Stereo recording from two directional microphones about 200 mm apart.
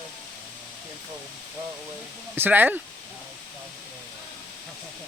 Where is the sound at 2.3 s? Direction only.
10° right (ahead or behind).